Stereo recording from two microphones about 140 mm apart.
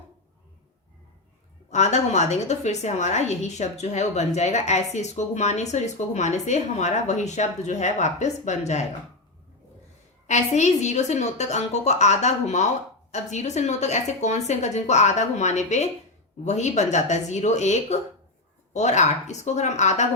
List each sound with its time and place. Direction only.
1.7 s a woman's voice: 55° left (ahead or behind)
10.2 s a woman's voice: 55° left (ahead or behind)